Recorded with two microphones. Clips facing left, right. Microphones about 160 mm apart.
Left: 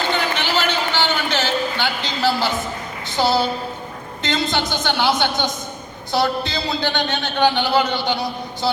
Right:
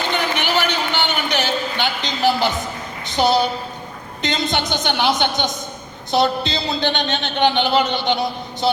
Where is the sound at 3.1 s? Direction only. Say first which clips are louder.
Right 2 dB; 20° right (ahead or behind).